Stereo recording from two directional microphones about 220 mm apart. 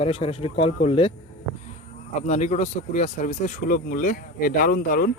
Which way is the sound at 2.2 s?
30° left (ahead or behind).